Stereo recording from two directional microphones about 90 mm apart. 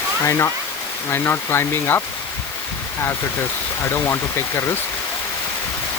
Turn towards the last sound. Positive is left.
turn(degrees=30)  # may be behind; listen again after turning